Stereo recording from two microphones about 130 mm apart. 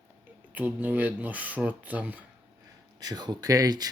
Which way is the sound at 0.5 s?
15° right (ahead or behind).